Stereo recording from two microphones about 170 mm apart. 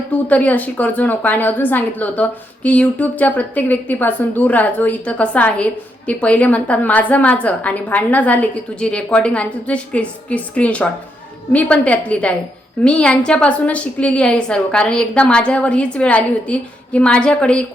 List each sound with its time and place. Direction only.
0.1 s a woman's voice: 10° left (ahead or behind)